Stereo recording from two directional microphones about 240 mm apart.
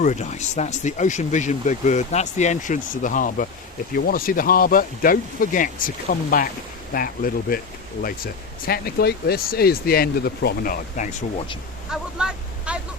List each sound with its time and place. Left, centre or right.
0.0 s speech: left
11.9 s vehicle: centre